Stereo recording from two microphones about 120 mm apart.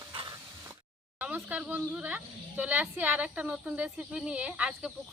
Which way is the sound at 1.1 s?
15° right (ahead or behind).